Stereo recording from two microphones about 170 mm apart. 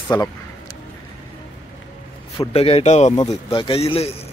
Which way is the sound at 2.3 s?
35° left (ahead or behind).